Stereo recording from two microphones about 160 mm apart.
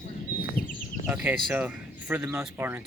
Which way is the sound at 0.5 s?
60° left (ahead or behind).